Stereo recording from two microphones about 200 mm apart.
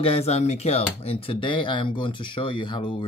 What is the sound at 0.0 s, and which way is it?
Speech, 30° left (ahead or behind).